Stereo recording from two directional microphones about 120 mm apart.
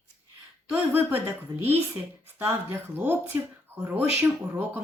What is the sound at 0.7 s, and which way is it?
Speech, 15° right (ahead or behind).